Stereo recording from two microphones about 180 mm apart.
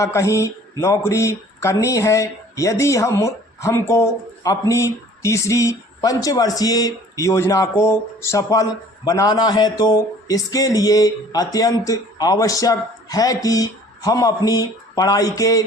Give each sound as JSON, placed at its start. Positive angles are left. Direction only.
{"t": 0.0, "sound": "speech", "side_deg": 15}